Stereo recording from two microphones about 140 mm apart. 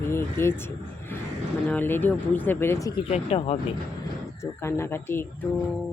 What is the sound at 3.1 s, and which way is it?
Speech, 50° left (ahead or behind).